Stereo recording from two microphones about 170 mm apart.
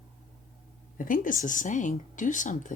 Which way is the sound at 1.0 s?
50° left (ahead or behind).